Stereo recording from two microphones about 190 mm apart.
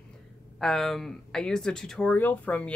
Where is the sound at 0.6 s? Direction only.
Centre (ahead or behind).